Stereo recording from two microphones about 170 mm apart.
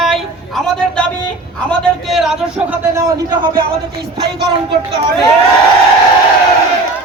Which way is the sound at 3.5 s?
65° right (ahead or behind).